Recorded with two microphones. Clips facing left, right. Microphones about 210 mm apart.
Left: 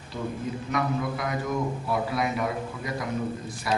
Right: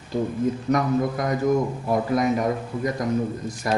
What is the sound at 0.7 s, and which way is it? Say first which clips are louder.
A man's voice: right 4 dB; 45° right (ahead or behind).